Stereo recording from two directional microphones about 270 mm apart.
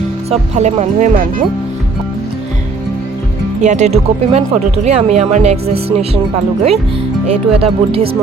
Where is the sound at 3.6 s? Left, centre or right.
Right.